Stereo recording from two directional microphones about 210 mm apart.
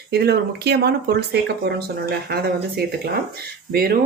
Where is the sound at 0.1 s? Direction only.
50° right (ahead or behind).